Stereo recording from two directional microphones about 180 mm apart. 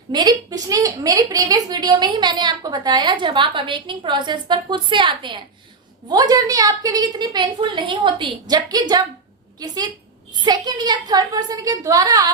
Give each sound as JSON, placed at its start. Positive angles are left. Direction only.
{"t": 0.1, "sound": "a woman's voice", "side_deg": -20}